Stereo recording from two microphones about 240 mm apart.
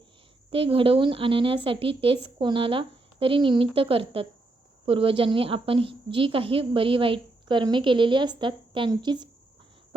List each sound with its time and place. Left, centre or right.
0.5 s a woman's voice: right